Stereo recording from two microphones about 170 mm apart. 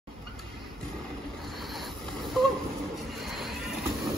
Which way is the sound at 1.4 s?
Centre (ahead or behind).